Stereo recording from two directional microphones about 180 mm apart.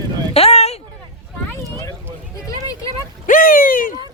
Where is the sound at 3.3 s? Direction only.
50° left (ahead or behind).